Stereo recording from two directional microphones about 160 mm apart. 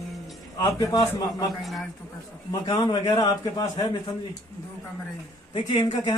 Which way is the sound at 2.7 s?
25° left (ahead or behind).